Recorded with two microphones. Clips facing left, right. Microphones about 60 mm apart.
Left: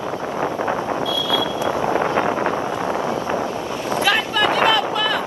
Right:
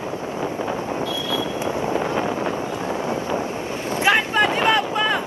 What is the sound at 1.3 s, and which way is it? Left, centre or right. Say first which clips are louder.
Vehicle: left 4 dB; right.